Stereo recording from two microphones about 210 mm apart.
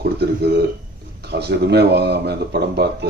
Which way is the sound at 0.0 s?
50° right (ahead or behind).